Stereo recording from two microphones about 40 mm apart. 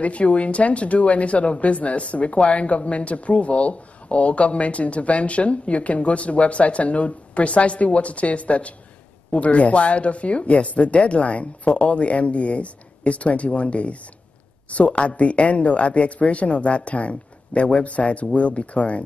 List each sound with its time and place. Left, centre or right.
0.0 s speech: left